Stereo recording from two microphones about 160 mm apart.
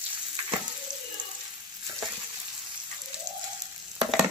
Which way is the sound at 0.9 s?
25° right (ahead or behind).